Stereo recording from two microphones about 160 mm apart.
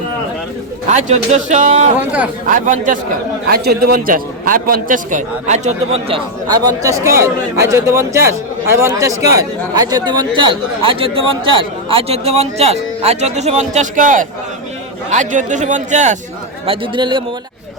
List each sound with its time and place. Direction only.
0.9 s a man's voice: 45° right (ahead or behind)
3.5 s a man's voice: 85° right; by 6.2 s 40° right (ahead or behind)
6.5 s speech: 20° right (ahead or behind); by 16.1 s 50° right (ahead or behind)
16.6 s speech: 30° right (ahead or behind)